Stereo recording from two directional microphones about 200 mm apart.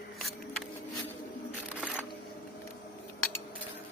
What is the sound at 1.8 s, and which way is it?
Camera, 5° right (ahead or behind).